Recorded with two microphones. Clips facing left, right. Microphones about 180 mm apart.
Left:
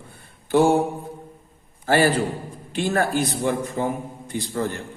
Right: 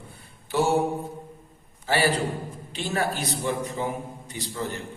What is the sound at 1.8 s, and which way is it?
A man's voice, 45° left (ahead or behind).